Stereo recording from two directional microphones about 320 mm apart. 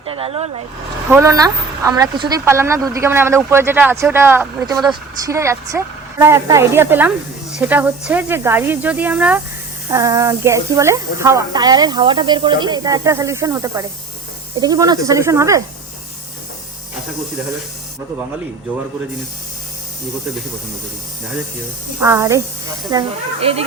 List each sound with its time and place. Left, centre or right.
0.0 s speech: centre
22.0 s speech: centre